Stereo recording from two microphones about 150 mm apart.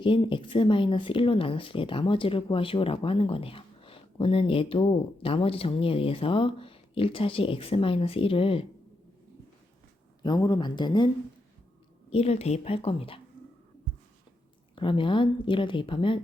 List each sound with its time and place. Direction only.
0.0 s speech: 35° left (ahead or behind)
10.2 s speech: 30° left (ahead or behind)
12.1 s speech: 45° left (ahead or behind)
14.8 s speech: 35° left (ahead or behind)